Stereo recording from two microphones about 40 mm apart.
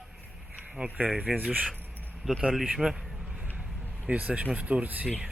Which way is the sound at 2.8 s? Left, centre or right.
Right.